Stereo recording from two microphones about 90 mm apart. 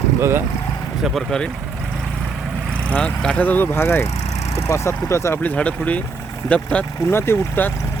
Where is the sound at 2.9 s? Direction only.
15° left (ahead or behind); by 5.4 s 30° left (ahead or behind).